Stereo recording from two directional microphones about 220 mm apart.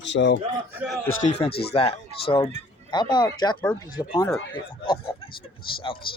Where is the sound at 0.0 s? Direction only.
55° left (ahead or behind).